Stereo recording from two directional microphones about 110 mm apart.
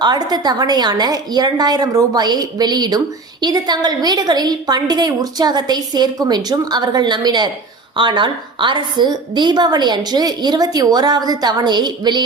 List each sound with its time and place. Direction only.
0.0 s a woman's voice: 40° right (ahead or behind)